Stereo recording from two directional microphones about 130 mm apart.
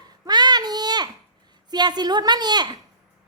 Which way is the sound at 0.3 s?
35° right (ahead or behind).